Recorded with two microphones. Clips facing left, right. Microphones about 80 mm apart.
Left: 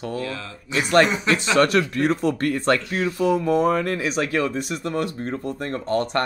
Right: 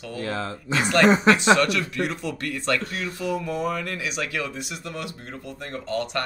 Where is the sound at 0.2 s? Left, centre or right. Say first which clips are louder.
Right 2 dB; right.